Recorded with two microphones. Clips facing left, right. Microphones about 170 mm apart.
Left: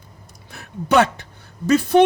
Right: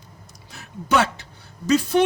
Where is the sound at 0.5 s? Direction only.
60° left (ahead or behind).